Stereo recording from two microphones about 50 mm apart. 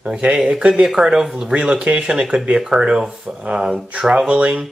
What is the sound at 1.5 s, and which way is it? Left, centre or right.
Speech, right.